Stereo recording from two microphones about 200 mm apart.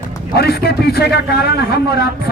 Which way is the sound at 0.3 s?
50° left (ahead or behind).